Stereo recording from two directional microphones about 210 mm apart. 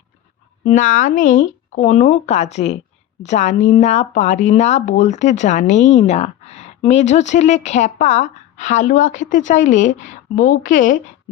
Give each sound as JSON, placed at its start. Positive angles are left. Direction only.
{"t": 0.6, "sound": "speech", "side_deg": 35}